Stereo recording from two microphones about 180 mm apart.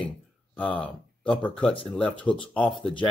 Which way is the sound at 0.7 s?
30° left (ahead or behind).